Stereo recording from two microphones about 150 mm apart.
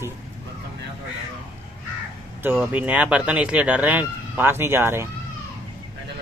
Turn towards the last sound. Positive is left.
turn(degrees=-15)  # may be behind; listen again after turning